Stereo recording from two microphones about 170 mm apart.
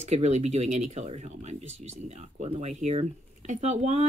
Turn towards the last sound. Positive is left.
turn(degrees=-40)  # may be behind; listen again after turning